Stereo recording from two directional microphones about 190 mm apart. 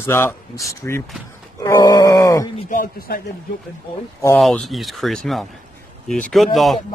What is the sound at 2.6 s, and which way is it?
Speech, 50° left (ahead or behind).